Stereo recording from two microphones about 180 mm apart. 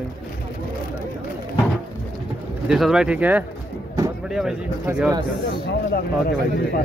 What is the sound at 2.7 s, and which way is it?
Speech, 5° right (ahead or behind).